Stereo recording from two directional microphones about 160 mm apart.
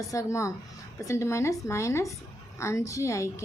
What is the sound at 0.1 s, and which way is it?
A woman's voice, 20° left (ahead or behind).